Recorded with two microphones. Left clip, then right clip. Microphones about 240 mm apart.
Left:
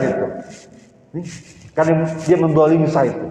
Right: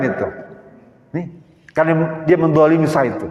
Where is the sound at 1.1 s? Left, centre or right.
Right.